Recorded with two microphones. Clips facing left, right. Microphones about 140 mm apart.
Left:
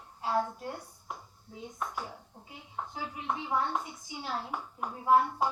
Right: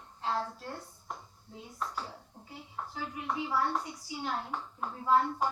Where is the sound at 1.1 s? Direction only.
5° left (ahead or behind).